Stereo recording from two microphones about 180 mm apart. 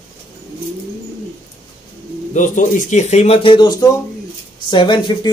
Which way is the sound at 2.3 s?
45° left (ahead or behind).